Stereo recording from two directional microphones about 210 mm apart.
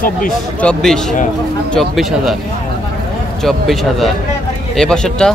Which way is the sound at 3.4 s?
Centre (ahead or behind).